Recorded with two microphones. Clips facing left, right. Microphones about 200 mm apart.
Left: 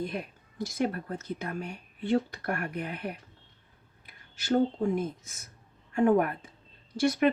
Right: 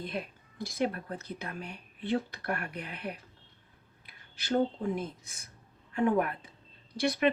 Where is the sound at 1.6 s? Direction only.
50° left (ahead or behind).